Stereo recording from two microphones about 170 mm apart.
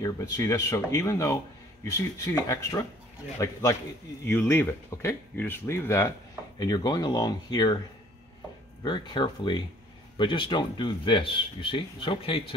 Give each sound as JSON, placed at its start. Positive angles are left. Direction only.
{"t": 0.0, "sound": "speech", "side_deg": 20}
{"t": 8.8, "sound": "speech", "side_deg": 25}